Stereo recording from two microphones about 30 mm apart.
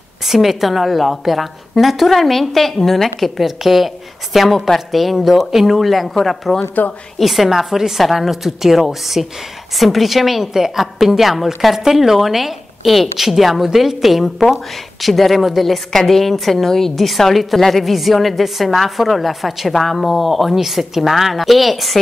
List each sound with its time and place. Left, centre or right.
0.3 s a woman's voice: centre
5.1 s a woman's voice: centre
6.8 s a woman's voice: left
7.2 s a woman's voice: centre
8.0 s a woman's voice: centre
10.4 s a woman's voice: centre
10.8 s a woman's voice: centre
15.9 s a woman's voice: centre